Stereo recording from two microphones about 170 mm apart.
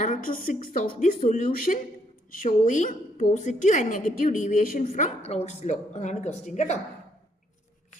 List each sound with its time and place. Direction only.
0.0 s a woman's voice: 55° left (ahead or behind)